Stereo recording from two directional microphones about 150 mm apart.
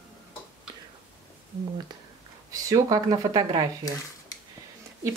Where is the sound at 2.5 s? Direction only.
25° right (ahead or behind).